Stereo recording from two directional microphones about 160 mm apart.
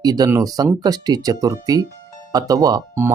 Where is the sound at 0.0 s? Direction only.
25° right (ahead or behind).